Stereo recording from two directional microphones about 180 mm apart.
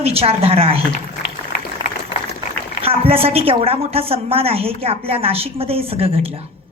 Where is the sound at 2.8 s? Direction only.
30° right (ahead or behind).